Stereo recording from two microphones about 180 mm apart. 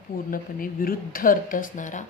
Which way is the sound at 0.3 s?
50° left (ahead or behind).